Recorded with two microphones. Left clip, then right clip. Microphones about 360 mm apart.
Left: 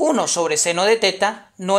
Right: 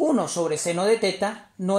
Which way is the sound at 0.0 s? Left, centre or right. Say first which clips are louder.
Left 5 dB; left.